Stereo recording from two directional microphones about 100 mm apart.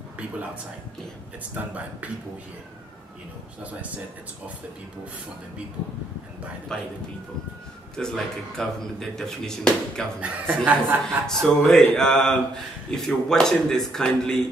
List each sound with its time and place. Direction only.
1.5 s speech: 15° right (ahead or behind)
6.7 s speech: 5° left (ahead or behind)
7.9 s speech: 5° left (ahead or behind)
10.2 s speech: 15° right (ahead or behind)
11.2 s speech: 5° left (ahead or behind)